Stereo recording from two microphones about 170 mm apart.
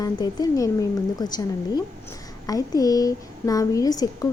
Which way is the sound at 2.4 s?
20° left (ahead or behind).